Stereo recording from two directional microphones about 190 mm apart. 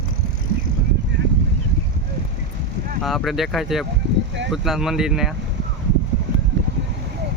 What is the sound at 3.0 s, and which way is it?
Speech, centre (ahead or behind).